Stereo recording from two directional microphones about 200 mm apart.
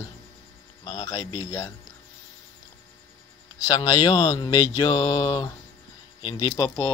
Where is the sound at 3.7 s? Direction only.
20° left (ahead or behind).